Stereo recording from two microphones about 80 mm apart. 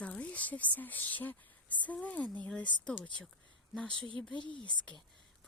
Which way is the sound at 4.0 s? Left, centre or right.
Right.